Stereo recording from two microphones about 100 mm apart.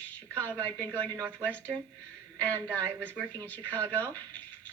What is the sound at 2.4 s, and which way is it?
Speech, 20° left (ahead or behind).